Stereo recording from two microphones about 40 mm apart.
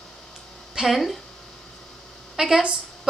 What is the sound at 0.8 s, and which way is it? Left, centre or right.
Speech, centre.